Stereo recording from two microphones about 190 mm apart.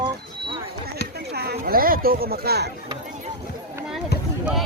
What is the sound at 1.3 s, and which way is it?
Speech, 55° right (ahead or behind).